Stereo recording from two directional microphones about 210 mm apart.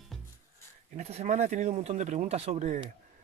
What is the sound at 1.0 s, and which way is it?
Speech, 30° right (ahead or behind).